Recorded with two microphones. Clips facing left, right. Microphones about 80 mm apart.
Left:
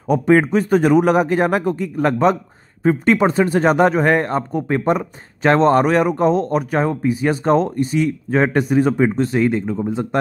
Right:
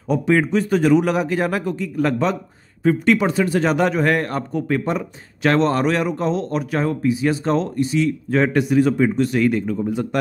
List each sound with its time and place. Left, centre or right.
0.1 s a man's voice: left